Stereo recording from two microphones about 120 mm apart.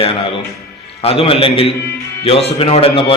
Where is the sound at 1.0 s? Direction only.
50° left (ahead or behind).